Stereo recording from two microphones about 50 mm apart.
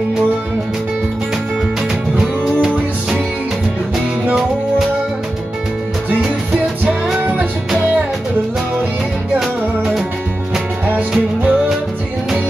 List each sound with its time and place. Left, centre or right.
2.1 s music: centre
9.4 s music: centre
10.9 s music: right